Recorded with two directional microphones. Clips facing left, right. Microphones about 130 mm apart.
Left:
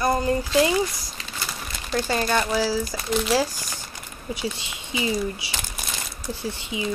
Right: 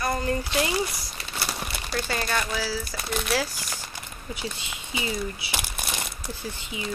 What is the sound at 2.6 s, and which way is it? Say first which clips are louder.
Speech: left 6 dB; 15° left (ahead or behind).